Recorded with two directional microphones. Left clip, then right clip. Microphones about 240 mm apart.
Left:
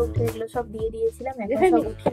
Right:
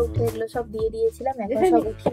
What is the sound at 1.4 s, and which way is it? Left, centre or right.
Speech, centre.